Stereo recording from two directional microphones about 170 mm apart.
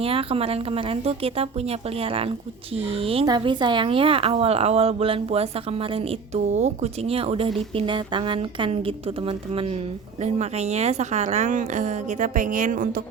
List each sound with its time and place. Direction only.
0.0 s a woman's voice: 35° right (ahead or behind); by 13.0 s 55° right (ahead or behind)